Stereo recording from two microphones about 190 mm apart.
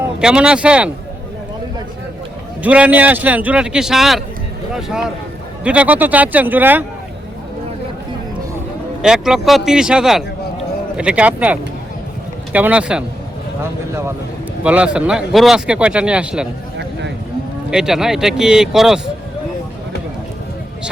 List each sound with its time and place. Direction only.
0.2 s a man's voice: 5° right (ahead or behind)
2.6 s speech: 5° right (ahead or behind)
9.0 s a man's voice: 5° right (ahead or behind)
14.6 s a man's voice: 5° right (ahead or behind)
17.7 s a man's voice: 5° right (ahead or behind)